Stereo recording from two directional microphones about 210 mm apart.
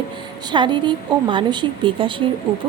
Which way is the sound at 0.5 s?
20° right (ahead or behind).